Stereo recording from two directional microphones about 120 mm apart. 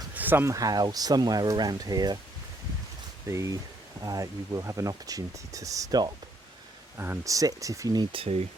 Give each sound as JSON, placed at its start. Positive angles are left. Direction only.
{"t": 0.1, "sound": "speech", "side_deg": -15}
{"t": 3.2, "sound": "speech", "side_deg": -25}
{"t": 6.9, "sound": "speech", "side_deg": -20}
{"t": 8.1, "sound": "speech", "side_deg": -55}